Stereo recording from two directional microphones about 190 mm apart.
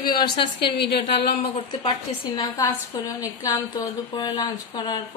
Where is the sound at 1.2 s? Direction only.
25° left (ahead or behind).